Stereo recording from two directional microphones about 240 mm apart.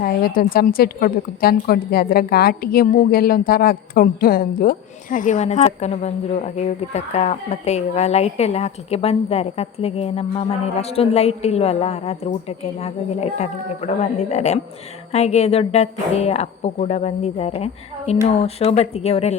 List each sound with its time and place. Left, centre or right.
0.0 s a woman's voice: left